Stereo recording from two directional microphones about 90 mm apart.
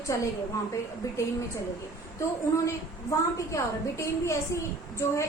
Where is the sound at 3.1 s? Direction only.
40° left (ahead or behind).